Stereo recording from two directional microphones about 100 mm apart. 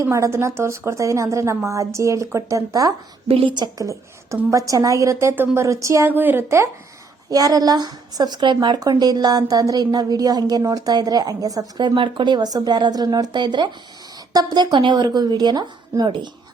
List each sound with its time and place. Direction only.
0.0 s a woman's voice: 30° right (ahead or behind)
3.2 s a woman's voice: 70° right (ahead or behind)
3.5 s a woman's voice: 40° right (ahead or behind)
6.1 s a woman's voice: 20° right (ahead or behind)
7.3 s a woman's voice: 35° right (ahead or behind)
11.8 s a woman's voice: 55° right (ahead or behind)